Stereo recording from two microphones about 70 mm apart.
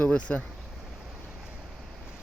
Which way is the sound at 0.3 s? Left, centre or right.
Centre.